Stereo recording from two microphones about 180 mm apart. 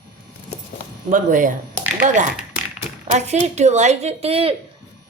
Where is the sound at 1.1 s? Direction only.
45° right (ahead or behind).